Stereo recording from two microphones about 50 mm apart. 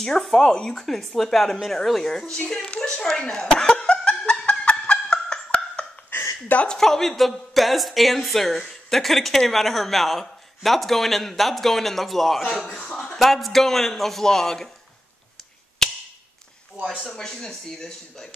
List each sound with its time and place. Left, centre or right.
0.0 s speech: centre
2.4 s a woman's voice: left
3.0 s a sound: centre
4.9 s music: centre
6.7 s speech: centre
17.1 s speech: centre